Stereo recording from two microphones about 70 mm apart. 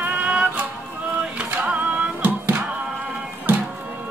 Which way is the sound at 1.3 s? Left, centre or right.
Centre.